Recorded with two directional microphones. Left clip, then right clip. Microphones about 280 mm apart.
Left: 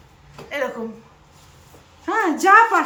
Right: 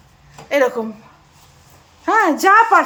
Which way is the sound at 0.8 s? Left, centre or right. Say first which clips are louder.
Right 7 dB; right.